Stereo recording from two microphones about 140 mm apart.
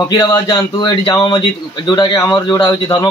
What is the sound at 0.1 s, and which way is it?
A man's voice, 30° left (ahead or behind).